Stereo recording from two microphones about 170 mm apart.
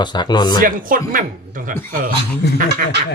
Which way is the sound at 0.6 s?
55° right (ahead or behind).